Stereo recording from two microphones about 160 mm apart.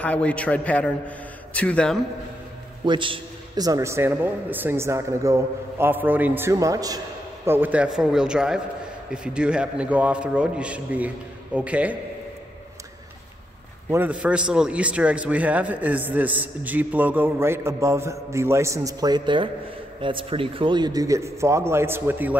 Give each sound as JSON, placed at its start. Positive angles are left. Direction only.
{"t": 0.0, "sound": "a man's voice", "side_deg": 10}
{"t": 2.8, "sound": "a man's voice", "side_deg": -30}
{"t": 13.8, "sound": "a man's voice", "side_deg": -10}